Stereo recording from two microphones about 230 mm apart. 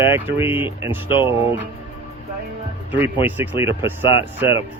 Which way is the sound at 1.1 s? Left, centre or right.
Left.